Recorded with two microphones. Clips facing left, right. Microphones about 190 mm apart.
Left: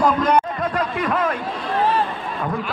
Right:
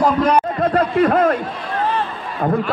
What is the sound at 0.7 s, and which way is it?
Speech, 45° right (ahead or behind).